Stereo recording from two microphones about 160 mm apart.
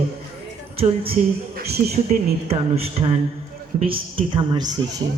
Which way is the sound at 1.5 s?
80° right.